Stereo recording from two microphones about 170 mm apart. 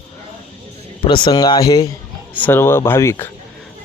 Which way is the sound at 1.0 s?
25° left (ahead or behind).